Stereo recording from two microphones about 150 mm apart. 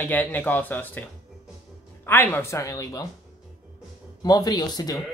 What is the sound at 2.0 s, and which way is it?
Speech, 15° left (ahead or behind).